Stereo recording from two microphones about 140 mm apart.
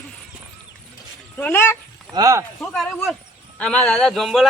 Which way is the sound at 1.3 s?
15° left (ahead or behind).